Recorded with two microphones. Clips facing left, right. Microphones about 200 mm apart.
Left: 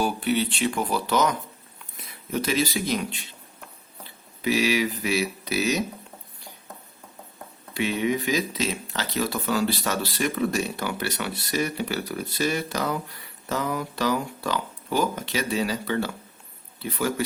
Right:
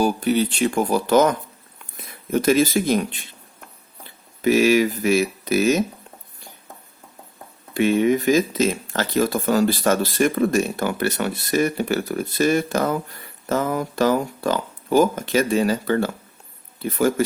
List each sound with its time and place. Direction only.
0.0 s speech: 40° right (ahead or behind)
4.4 s speech: 50° right (ahead or behind)
7.7 s speech: 50° right (ahead or behind)